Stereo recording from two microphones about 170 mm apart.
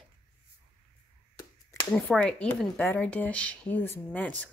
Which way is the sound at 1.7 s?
15° left (ahead or behind).